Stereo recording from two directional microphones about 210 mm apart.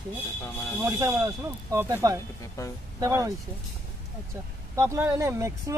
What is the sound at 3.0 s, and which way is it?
Speech, 15° right (ahead or behind).